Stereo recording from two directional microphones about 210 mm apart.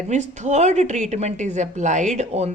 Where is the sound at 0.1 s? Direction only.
35° right (ahead or behind).